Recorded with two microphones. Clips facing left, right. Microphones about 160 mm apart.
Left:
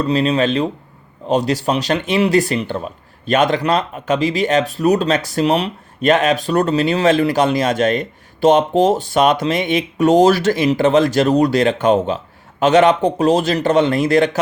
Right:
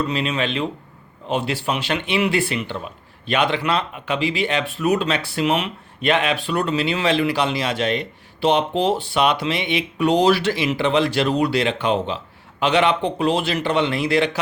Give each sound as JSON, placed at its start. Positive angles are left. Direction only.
{"t": 0.0, "sound": "speech", "side_deg": 35}